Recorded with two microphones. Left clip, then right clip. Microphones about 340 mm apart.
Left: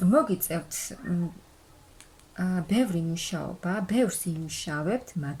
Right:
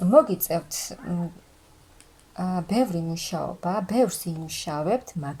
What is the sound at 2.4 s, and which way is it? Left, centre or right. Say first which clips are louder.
A woman's voice: right 3 dB; centre.